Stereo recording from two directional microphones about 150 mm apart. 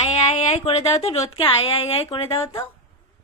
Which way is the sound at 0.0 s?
45° left (ahead or behind).